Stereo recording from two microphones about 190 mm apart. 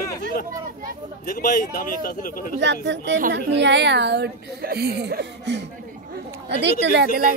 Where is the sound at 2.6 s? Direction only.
65° right (ahead or behind).